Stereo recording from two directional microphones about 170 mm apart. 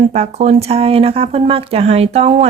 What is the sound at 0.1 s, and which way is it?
Speech, 40° right (ahead or behind).